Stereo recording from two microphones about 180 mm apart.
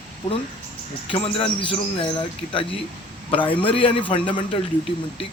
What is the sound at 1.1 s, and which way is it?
A man's voice, 30° left (ahead or behind).